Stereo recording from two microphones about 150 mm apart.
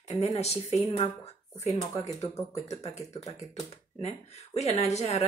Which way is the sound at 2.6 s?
50° left (ahead or behind).